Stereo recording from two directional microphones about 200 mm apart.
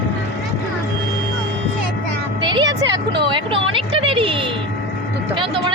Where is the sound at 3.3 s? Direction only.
25° right (ahead or behind).